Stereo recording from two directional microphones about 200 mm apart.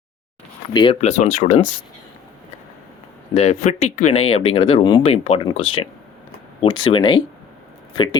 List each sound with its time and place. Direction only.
0.7 s speech: 25° left (ahead or behind)
3.3 s speech: 30° left (ahead or behind)